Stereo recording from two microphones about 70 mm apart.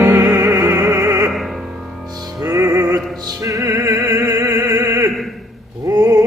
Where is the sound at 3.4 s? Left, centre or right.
Right.